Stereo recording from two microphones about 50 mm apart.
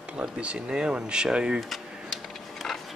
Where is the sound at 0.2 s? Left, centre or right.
Right.